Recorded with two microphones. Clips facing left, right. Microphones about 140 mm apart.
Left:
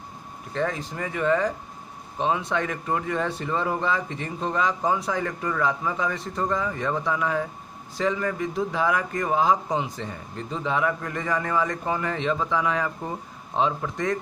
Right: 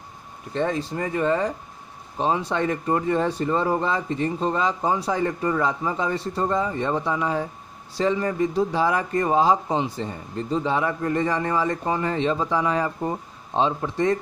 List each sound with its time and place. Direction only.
0.6 s speech: 30° right (ahead or behind)